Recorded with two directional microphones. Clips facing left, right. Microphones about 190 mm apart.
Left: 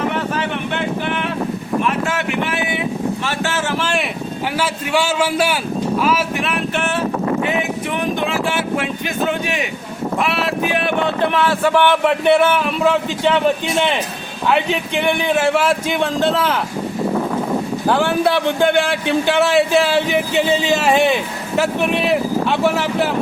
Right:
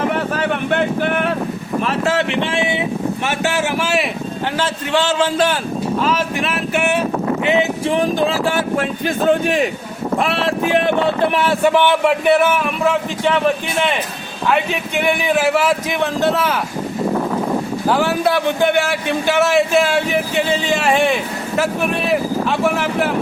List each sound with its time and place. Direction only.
0.3 s a sound: 45° right (ahead or behind)
1.8 s a sound: 35° right (ahead or behind)
3.2 s a man's voice: 15° right (ahead or behind)
4.5 s a man's voice: 10° left (ahead or behind)
6.7 s a man's voice: 10° right (ahead or behind)
7.6 s speech: 30° right (ahead or behind)
11.3 s speech: 25° right (ahead or behind)
11.7 s a man's voice: 10° right (ahead or behind)
15.4 s a man's voice: 5° right (ahead or behind)
17.9 s a man's voice: 5° right (ahead or behind)